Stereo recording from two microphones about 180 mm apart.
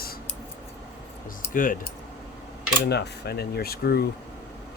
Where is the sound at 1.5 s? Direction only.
50° left (ahead or behind).